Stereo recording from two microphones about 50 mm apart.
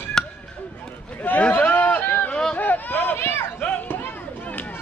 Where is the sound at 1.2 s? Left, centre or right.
Left.